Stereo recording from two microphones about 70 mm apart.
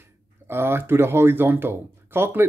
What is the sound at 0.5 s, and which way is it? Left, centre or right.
Speech, right.